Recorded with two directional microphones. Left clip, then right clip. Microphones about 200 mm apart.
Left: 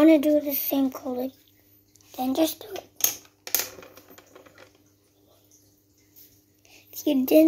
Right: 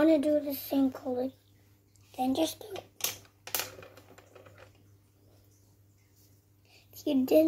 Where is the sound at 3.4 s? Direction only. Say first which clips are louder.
Left 5 dB; 25° left (ahead or behind).